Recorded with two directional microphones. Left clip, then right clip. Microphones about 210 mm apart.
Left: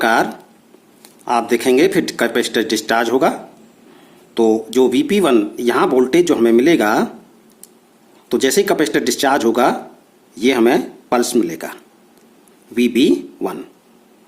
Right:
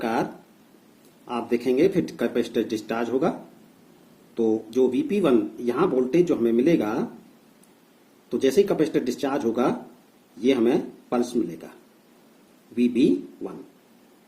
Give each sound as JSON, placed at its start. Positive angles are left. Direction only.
{"t": 0.0, "sound": "speech", "side_deg": 35}
{"t": 4.4, "sound": "speech", "side_deg": 35}
{"t": 8.3, "sound": "speech", "side_deg": 30}
{"t": 12.7, "sound": "speech", "side_deg": 30}